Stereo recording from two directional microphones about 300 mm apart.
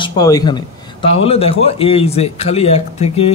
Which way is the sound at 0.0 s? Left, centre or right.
Centre.